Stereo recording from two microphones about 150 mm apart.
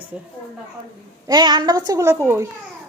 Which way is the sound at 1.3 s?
30° right (ahead or behind).